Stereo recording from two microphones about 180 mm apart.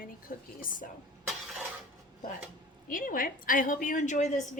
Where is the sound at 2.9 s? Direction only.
50° left (ahead or behind).